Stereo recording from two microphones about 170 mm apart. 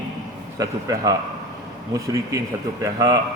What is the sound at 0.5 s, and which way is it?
A man's voice, 20° right (ahead or behind).